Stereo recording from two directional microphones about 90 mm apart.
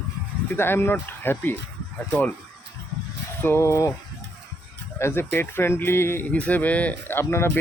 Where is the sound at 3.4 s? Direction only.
25° left (ahead or behind).